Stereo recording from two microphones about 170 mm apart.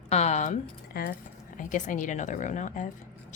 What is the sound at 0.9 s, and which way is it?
Speech, 65° left (ahead or behind).